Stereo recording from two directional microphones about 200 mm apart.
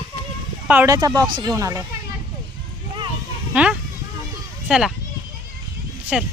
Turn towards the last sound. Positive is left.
turn(degrees=-5)  # may be behind; listen again after turning